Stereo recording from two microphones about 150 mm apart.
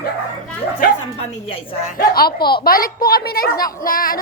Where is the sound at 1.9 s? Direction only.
90° left.